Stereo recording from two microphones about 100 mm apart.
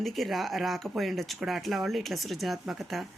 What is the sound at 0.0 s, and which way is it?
Speech, centre (ahead or behind).